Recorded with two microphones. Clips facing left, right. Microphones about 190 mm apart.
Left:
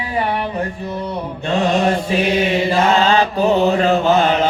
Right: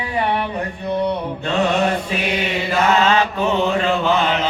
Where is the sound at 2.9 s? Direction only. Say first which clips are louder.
Left 2 dB; 35° left (ahead or behind).